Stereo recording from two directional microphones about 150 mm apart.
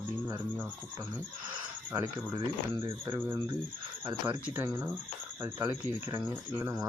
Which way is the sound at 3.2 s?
15° right (ahead or behind).